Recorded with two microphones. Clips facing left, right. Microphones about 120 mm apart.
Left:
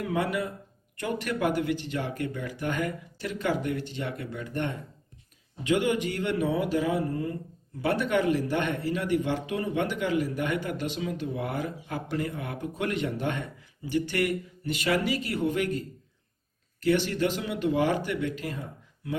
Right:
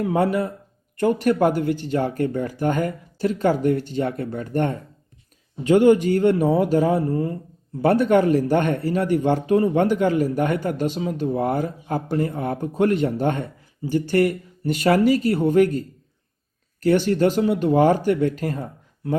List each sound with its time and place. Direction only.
0.0 s speech: 40° right (ahead or behind)
16.8 s speech: 45° right (ahead or behind)